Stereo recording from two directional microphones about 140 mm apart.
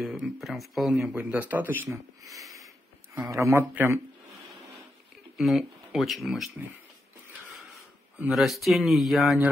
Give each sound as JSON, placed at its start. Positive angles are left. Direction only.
{"t": 0.0, "sound": "speech", "side_deg": -5}
{"t": 1.1, "sound": "a man's voice", "side_deg": -10}
{"t": 3.3, "sound": "speech", "side_deg": -20}
{"t": 5.4, "sound": "speech", "side_deg": 0}
{"t": 8.2, "sound": "speech", "side_deg": -5}